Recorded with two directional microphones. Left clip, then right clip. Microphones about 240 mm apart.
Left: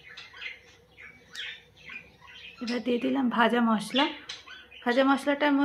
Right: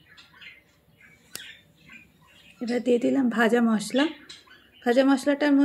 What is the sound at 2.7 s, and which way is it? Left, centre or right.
Speech, centre.